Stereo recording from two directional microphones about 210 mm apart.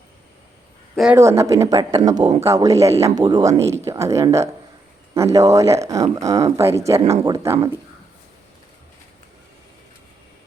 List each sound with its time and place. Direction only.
0.9 s speech: 10° right (ahead or behind)